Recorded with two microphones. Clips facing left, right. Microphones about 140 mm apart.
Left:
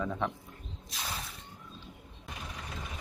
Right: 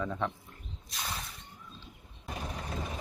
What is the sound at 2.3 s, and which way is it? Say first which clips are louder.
Vehicle: right 5 dB; 35° right (ahead or behind).